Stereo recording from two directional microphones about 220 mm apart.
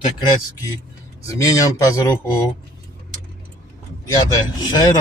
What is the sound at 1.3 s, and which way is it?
Speech, 15° left (ahead or behind).